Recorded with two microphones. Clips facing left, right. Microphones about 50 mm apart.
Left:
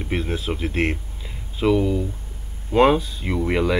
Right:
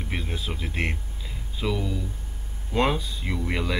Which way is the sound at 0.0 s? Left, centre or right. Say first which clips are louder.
Left 7 dB; centre.